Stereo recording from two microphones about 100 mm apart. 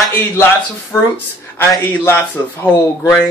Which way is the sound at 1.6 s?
20° left (ahead or behind).